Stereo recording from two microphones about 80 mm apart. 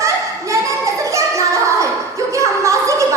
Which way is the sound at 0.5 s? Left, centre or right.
Right.